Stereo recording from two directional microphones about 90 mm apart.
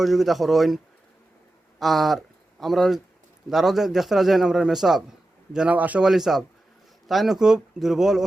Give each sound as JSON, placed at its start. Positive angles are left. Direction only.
{"t": 0.0, "sound": "a man's voice", "side_deg": 0}
{"t": 1.8, "sound": "a man's voice", "side_deg": 0}
{"t": 5.5, "sound": "speech", "side_deg": -15}
{"t": 6.1, "sound": "a man's voice", "side_deg": -5}